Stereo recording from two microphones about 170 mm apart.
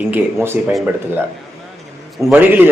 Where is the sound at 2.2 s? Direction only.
5° right (ahead or behind).